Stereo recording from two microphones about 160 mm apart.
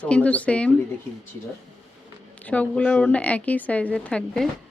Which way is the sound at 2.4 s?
10° left (ahead or behind).